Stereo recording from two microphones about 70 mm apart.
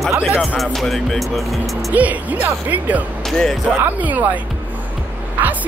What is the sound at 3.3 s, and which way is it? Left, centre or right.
Speech, centre.